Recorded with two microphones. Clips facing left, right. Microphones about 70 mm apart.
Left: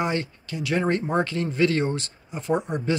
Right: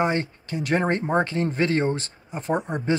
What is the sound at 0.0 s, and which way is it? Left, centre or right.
Speech, right.